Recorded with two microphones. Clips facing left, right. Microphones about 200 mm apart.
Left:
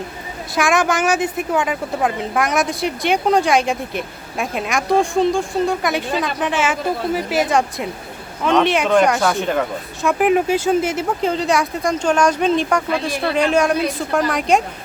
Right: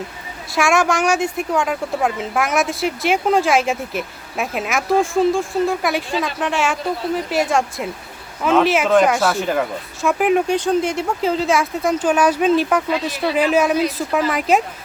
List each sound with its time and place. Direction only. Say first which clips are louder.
0.5 s speech: even; centre (ahead or behind)